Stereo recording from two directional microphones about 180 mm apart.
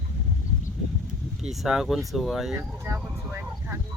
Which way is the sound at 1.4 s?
Centre (ahead or behind).